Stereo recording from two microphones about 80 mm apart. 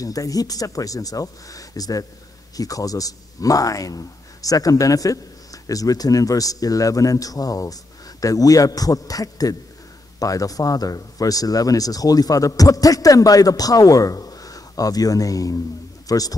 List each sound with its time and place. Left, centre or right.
0.0 s a man's voice: left